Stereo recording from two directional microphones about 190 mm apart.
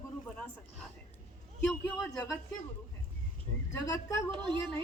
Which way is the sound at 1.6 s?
5° left (ahead or behind).